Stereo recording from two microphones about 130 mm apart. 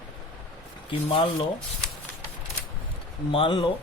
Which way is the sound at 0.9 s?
45° left (ahead or behind).